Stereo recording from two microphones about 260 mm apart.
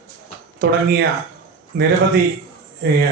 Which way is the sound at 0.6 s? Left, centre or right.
Right.